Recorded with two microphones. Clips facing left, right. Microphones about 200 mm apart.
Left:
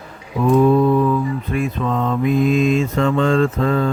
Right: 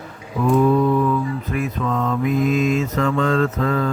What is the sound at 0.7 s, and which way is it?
Mantra, 30° left (ahead or behind).